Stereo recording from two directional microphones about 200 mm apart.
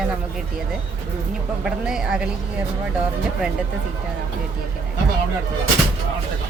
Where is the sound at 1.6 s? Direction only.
5° right (ahead or behind).